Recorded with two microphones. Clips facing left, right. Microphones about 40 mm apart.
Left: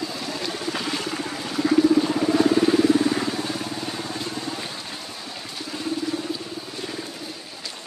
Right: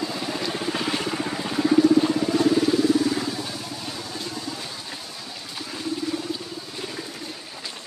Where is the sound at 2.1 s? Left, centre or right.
Left.